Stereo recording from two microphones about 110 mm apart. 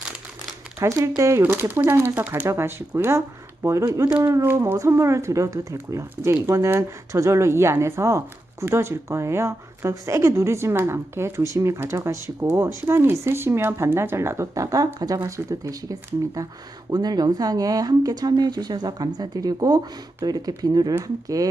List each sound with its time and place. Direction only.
0.8 s a woman's voice: 30° right (ahead or behind)
1.4 s a woman's voice: 15° right (ahead or behind); by 20.9 s 35° right (ahead or behind)